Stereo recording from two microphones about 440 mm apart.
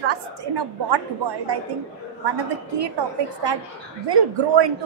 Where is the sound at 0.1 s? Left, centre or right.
Right.